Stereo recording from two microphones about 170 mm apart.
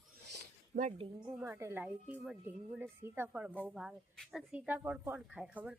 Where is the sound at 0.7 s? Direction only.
50° right (ahead or behind).